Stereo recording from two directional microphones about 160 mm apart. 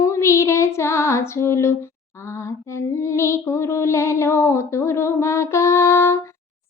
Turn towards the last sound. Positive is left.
turn(degrees=15)  # may be behind; listen again after turning